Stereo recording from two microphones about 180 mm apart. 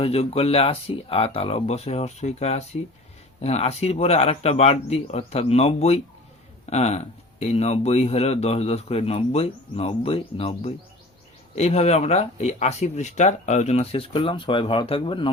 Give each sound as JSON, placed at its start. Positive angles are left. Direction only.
{"t": 0.0, "sound": "speech", "side_deg": 35}